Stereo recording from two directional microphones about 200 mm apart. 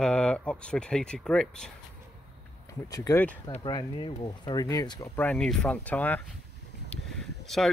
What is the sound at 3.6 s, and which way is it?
Speech, 25° left (ahead or behind).